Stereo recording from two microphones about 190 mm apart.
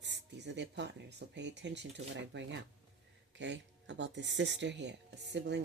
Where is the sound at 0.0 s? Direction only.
65° right (ahead or behind).